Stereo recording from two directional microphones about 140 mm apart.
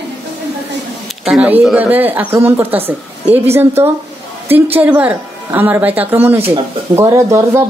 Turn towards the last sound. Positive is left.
turn(degrees=-20)  # may be behind; listen again after turning